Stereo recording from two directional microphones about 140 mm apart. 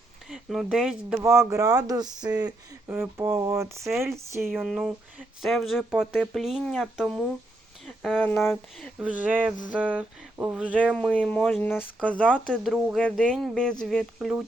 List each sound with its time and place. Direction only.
0.3 s speech: 5° right (ahead or behind)
1.2 s speech: 20° right (ahead or behind)
2.9 s speech: 15° right (ahead or behind)
4.5 s speech: 5° right (ahead or behind)
10.9 s speech: 10° left (ahead or behind)